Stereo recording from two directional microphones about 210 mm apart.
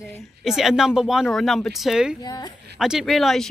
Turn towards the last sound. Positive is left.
turn(degrees=0)  # may be behind; listen again after turning